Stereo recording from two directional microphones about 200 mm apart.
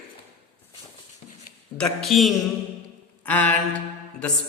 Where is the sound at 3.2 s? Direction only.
5° left (ahead or behind).